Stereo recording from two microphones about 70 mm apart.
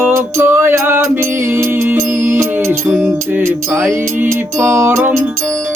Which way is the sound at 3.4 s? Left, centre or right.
Right.